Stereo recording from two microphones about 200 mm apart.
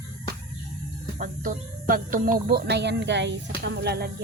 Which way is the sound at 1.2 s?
45° right (ahead or behind).